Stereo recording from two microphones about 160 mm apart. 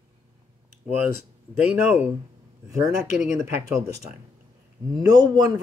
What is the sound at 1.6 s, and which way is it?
Speech, 10° right (ahead or behind).